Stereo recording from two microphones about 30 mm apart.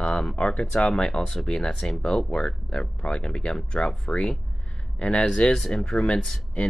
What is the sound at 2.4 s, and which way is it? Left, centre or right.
Speech, centre.